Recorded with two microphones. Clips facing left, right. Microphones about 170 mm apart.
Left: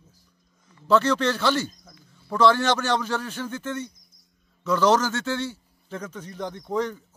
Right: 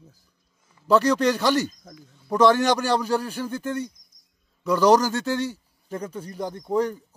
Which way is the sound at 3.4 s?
35° right (ahead or behind).